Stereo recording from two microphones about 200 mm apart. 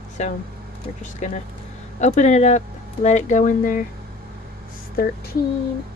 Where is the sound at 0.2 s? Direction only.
35° left (ahead or behind).